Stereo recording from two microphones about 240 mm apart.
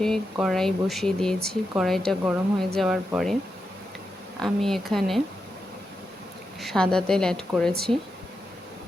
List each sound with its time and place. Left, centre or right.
0.0 s speech: centre
4.4 s speech: centre
6.6 s speech: centre